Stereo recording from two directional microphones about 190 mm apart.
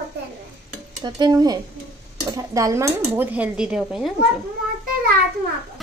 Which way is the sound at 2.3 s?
15° right (ahead or behind).